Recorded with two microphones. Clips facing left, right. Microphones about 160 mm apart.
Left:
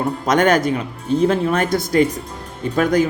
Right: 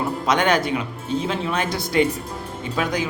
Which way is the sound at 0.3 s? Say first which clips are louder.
Left 4 dB; 45° left (ahead or behind).